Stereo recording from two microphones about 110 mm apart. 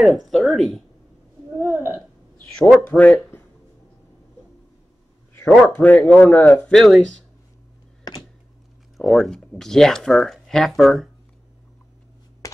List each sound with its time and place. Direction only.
0.0 s speech: centre (ahead or behind)
1.6 s hiccup: 20° right (ahead or behind)
2.9 s speech: 15° left (ahead or behind)
5.3 s a sound: 15° left (ahead or behind)
5.8 s speech: 10° left (ahead or behind)
6.7 s speech: centre (ahead or behind)
8.9 s speech: centre (ahead or behind)